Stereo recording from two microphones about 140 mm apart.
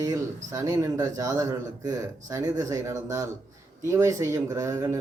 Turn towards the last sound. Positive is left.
turn(degrees=-25)  # may be behind; listen again after turning